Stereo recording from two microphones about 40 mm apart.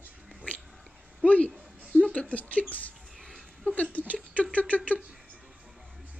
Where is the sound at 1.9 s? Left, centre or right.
Left.